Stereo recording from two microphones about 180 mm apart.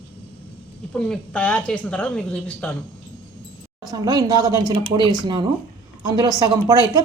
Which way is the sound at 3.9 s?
20° right (ahead or behind).